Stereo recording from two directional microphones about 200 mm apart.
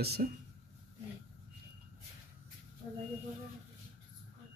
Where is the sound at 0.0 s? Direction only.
50° right (ahead or behind).